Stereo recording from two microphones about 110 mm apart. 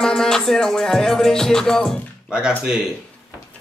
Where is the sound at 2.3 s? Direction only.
10° right (ahead or behind).